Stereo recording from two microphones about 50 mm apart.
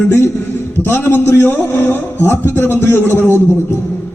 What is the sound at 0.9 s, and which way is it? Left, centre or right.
A man's voice, left.